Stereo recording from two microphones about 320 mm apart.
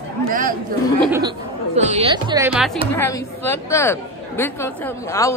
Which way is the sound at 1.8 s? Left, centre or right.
Right.